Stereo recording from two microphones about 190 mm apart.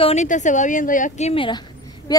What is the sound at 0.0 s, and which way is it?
A woman's voice, 35° left (ahead or behind).